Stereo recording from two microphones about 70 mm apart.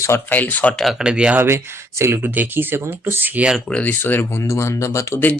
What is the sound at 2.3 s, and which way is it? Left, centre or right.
Speech, right.